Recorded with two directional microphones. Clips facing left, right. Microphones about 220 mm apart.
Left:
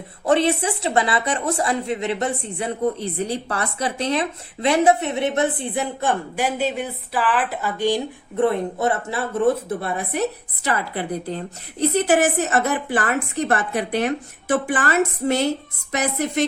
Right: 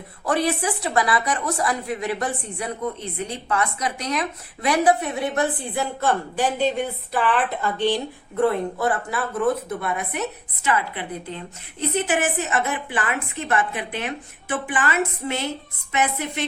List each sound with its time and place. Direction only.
0.3 s a woman's voice: 25° left (ahead or behind); by 16.5 s 45° left (ahead or behind)